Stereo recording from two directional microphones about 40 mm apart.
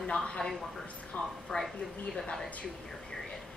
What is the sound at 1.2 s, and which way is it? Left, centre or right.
Speech, left.